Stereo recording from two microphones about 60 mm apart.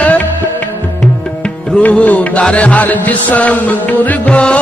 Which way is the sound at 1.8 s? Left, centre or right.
Left.